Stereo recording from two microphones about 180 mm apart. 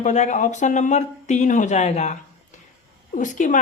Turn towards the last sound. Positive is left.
turn(degrees=45)  # may be behind; listen again after turning